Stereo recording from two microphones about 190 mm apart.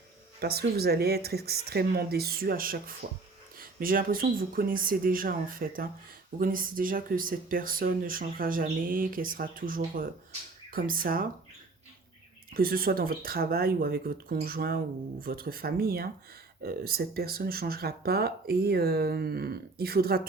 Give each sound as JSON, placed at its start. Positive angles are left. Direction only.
{"t": 0.3, "sound": "speech", "side_deg": -55}
{"t": 12.5, "sound": "speech", "side_deg": -50}